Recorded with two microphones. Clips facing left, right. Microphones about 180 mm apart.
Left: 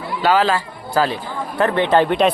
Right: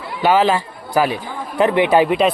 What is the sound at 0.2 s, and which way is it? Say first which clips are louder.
Speech: right 2 dB; 20° right (ahead or behind).